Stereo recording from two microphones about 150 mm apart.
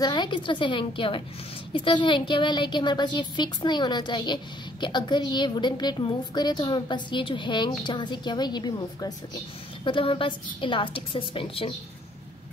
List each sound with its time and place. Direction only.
0.0 s a woman's voice: 30° left (ahead or behind)